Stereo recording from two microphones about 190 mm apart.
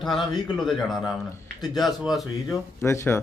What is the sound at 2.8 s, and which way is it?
Speech, 15° left (ahead or behind).